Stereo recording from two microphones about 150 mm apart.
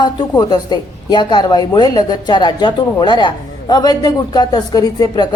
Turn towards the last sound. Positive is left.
turn(degrees=25)  # may be behind; listen again after turning